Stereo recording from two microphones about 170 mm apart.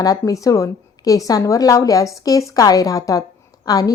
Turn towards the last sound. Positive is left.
turn(degrees=20)  # may be behind; listen again after turning